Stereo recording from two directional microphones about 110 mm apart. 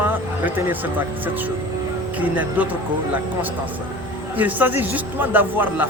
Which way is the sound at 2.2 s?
15° right (ahead or behind).